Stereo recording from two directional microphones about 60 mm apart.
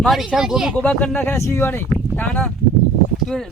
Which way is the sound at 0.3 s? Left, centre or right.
Centre.